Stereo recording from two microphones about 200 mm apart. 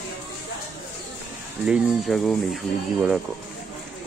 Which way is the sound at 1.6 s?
Centre (ahead or behind).